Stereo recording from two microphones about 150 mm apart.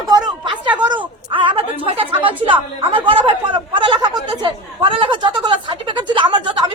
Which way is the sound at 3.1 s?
35° right (ahead or behind).